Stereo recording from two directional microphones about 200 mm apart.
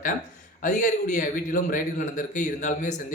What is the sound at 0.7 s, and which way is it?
A man's voice, 35° left (ahead or behind).